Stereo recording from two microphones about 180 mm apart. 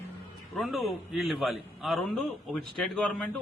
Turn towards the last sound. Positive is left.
turn(degrees=0)  # may be behind; listen again after turning